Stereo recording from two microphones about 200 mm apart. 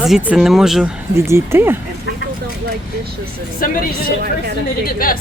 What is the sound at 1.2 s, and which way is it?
Speech, 10° right (ahead or behind).